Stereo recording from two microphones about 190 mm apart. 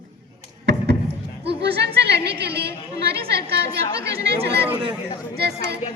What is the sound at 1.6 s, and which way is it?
Yodeling, 60° right (ahead or behind).